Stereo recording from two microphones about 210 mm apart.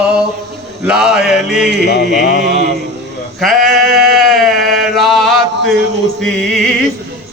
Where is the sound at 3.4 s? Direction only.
Centre (ahead or behind).